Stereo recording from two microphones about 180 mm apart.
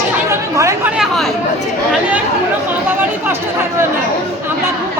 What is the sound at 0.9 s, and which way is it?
Chatter, centre (ahead or behind).